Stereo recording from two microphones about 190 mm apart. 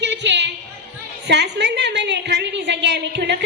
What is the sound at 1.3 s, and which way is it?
A woman's voice, 65° right (ahead or behind).